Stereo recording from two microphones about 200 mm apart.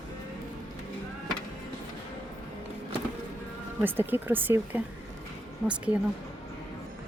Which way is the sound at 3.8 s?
10° right (ahead or behind).